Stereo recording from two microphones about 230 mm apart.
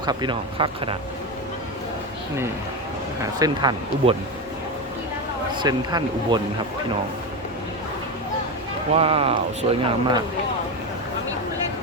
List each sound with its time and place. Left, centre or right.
0.0 s speech: centre
3.3 s speech: centre
5.5 s speech: centre
8.9 s speech: right